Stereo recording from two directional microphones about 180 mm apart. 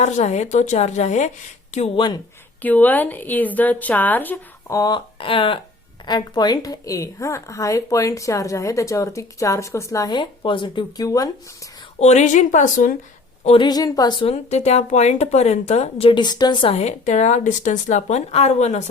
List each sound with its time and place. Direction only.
0.0 s speech: 40° left (ahead or behind)
2.6 s a woman's voice: 10° left (ahead or behind)
4.8 s a woman's voice: 25° left (ahead or behind)
11.9 s speech: 40° left (ahead or behind)
13.4 s speech: 30° left (ahead or behind)